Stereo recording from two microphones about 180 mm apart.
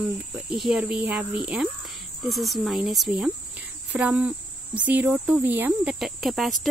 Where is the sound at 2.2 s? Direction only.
Centre (ahead or behind).